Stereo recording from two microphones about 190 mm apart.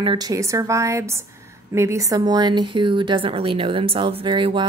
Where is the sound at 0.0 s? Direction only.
25° right (ahead or behind).